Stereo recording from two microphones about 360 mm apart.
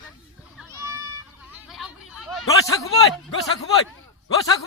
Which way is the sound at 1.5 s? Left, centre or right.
Centre.